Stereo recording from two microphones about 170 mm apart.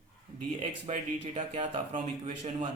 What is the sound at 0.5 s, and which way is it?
Speech, 40° right (ahead or behind).